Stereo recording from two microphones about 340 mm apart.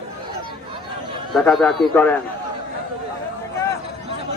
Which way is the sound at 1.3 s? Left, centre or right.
Centre.